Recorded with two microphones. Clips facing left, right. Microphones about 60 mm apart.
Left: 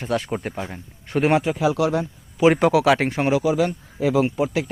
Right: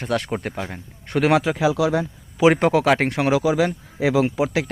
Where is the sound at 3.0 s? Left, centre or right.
Right.